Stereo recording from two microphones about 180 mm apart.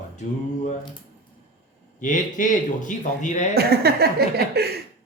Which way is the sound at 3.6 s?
60° right (ahead or behind).